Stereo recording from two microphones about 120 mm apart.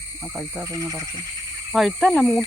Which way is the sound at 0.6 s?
30° right (ahead or behind).